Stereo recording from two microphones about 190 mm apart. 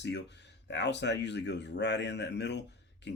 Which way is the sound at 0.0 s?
65° left (ahead or behind).